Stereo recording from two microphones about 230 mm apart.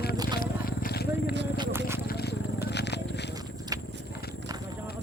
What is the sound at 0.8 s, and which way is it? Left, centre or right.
Vehicle, left.